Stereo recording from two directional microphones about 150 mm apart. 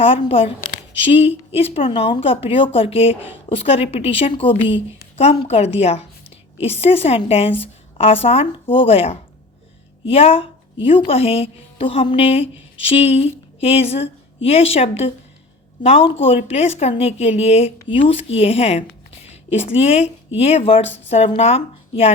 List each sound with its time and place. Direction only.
0.0 s a woman's voice: 40° left (ahead or behind)